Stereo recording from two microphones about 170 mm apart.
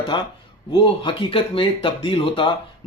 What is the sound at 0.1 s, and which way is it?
Speech, 30° left (ahead or behind).